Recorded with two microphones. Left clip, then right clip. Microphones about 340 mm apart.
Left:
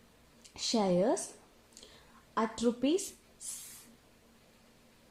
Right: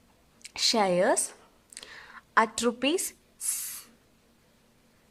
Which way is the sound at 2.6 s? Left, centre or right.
Right.